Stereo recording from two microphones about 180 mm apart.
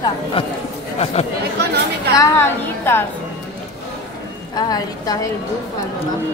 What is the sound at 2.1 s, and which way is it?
Speech, 15° left (ahead or behind).